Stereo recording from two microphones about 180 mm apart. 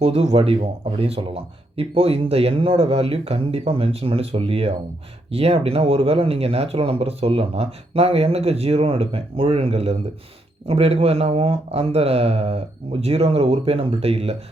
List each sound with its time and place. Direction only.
0.0 s speech: 35° right (ahead or behind)